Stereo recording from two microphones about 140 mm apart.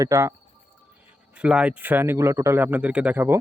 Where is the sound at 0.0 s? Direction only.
20° right (ahead or behind).